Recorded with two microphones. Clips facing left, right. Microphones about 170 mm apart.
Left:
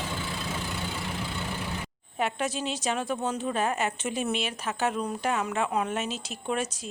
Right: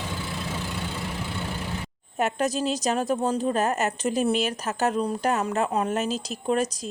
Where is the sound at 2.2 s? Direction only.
45° right (ahead or behind).